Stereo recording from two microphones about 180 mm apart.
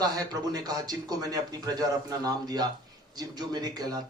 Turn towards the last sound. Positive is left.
turn(degrees=-20)  # may be behind; listen again after turning